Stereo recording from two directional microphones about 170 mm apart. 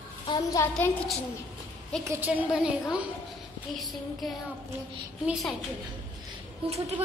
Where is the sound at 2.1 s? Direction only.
10° right (ahead or behind).